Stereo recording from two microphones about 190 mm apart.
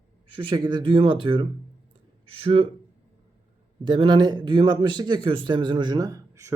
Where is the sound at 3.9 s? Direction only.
25° right (ahead or behind).